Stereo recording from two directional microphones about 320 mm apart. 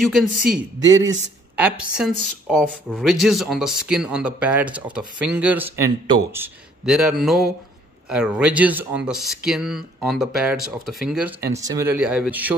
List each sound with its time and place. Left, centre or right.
0.7 s a man's voice: right
1.6 s speech: centre